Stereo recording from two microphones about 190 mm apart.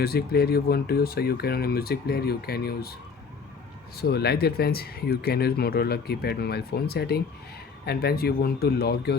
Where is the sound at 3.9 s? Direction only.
55° left (ahead or behind).